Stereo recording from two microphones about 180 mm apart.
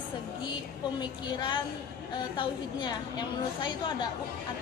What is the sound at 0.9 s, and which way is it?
A woman's voice, 25° left (ahead or behind).